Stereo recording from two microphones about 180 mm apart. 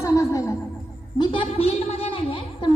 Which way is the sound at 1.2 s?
30° left (ahead or behind).